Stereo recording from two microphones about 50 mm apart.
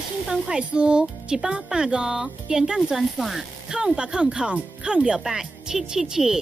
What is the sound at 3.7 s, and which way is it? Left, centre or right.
Speech, centre.